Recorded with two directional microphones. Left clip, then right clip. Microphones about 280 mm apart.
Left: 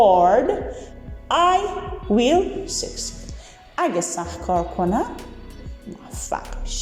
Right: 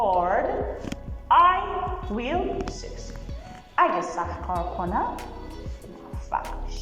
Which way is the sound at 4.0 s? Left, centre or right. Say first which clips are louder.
Left 2 dB; left.